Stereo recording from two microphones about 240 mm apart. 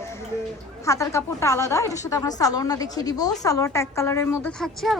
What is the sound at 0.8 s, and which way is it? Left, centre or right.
A woman's voice, centre.